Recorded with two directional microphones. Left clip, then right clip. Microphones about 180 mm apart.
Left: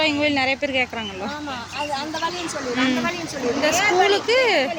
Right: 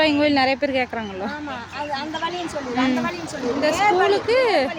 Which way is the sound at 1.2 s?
5° left (ahead or behind).